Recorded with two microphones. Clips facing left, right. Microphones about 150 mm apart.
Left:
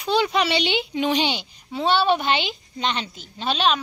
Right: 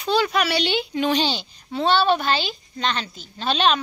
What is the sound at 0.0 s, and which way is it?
A woman's voice, 20° left (ahead or behind).